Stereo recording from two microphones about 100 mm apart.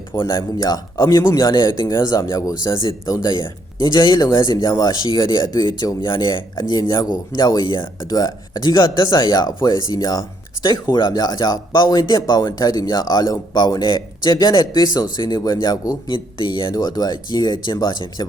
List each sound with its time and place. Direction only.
0.3 s speech: 35° left (ahead or behind)
16.1 s speech: 55° left (ahead or behind)
16.7 s speech: 40° left (ahead or behind)